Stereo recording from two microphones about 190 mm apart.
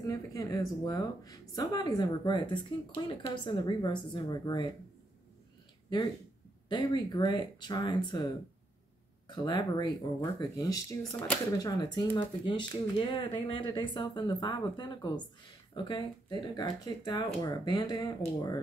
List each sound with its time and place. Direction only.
0.0 s speech: 20° left (ahead or behind)
6.7 s speech: 20° left (ahead or behind)
9.3 s speech: 25° left (ahead or behind)